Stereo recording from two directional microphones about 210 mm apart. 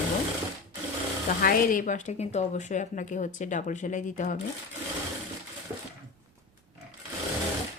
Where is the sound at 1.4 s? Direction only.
40° left (ahead or behind).